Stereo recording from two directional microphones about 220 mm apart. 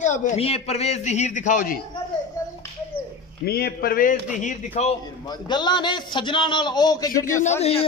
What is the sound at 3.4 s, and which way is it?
A man's voice, 45° left (ahead or behind).